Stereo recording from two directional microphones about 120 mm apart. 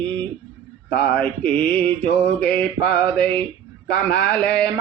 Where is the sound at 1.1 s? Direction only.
10° left (ahead or behind).